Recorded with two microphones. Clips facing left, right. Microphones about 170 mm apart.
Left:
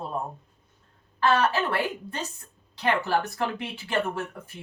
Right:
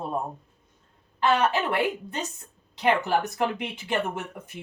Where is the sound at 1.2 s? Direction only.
20° right (ahead or behind).